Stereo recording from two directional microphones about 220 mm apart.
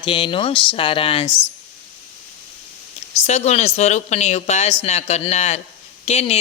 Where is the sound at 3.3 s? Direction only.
30° left (ahead or behind).